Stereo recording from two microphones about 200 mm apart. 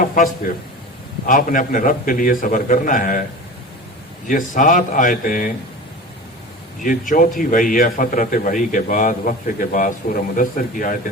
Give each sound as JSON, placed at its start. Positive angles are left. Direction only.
{"t": 1.3, "sound": "a man's voice", "side_deg": 40}
{"t": 4.3, "sound": "a man's voice", "side_deg": 40}
{"t": 6.8, "sound": "a man's voice", "side_deg": 40}